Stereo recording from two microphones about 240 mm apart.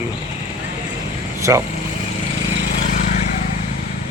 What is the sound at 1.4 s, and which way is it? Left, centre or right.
Speech, centre.